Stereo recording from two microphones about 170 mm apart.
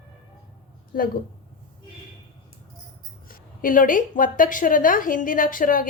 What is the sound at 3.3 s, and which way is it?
A woman's voice, 55° left (ahead or behind).